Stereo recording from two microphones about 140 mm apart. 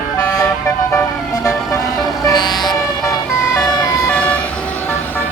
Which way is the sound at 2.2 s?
30° left (ahead or behind).